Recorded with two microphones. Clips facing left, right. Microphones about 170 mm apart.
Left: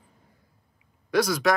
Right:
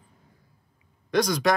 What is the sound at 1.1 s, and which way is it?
Speech, 5° left (ahead or behind).